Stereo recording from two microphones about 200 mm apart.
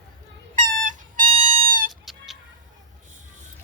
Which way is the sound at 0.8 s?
40° right (ahead or behind).